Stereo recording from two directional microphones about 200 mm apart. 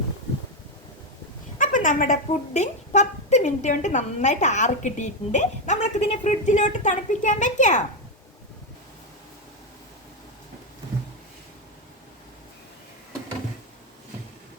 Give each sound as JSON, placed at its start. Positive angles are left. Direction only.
{"t": 1.5, "sound": "speech", "side_deg": 40}